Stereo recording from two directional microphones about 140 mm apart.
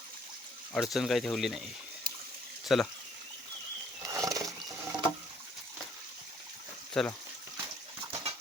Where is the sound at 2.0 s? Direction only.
90° right.